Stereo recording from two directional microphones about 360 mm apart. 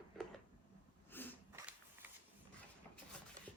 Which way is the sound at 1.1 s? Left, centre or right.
Centre.